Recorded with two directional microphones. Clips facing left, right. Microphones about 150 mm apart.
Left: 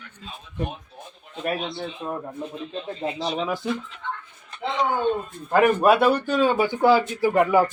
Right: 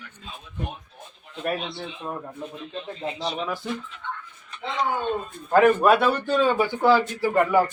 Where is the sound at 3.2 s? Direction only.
15° left (ahead or behind).